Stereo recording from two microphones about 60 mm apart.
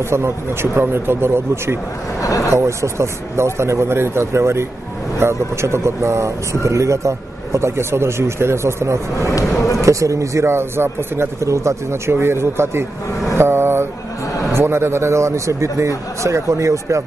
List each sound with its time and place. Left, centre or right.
0.1 s a man's voice: right
2.2 s speech: left
2.5 s a man's voice: right
11.4 s a man's voice: right
13.4 s a sound: right
14.5 s a man's voice: right